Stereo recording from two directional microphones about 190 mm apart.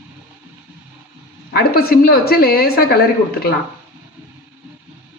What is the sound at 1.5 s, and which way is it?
A woman's voice, 55° left (ahead or behind).